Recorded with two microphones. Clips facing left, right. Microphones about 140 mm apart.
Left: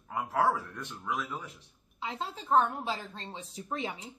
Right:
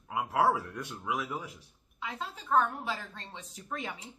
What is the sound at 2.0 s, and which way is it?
A woman's voice, 30° left (ahead or behind).